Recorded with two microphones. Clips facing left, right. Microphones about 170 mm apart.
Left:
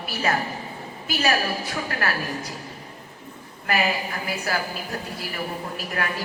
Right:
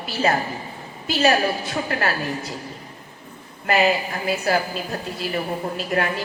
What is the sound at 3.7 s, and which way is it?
A woman's voice, 25° right (ahead or behind).